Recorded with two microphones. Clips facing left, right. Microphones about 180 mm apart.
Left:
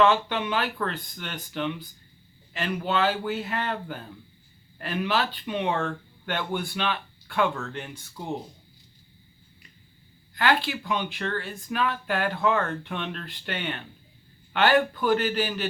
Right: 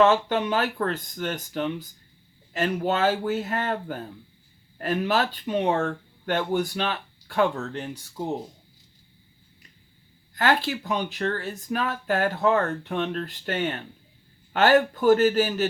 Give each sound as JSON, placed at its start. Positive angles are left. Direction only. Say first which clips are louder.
{"t": 0.0, "sound": "speech", "louder": "right 2 dB", "side_deg": -40}
{"t": 10.3, "sound": "speech", "louder": "right 1 dB", "side_deg": -40}